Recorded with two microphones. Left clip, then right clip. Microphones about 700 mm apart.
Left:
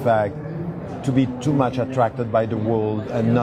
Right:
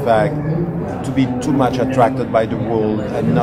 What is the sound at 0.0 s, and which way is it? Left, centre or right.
A man's voice, left.